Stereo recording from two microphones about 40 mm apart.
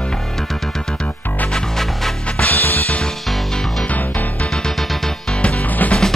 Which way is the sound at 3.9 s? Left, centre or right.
Left.